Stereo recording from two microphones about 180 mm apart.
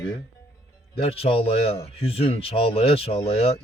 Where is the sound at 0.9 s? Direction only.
35° left (ahead or behind).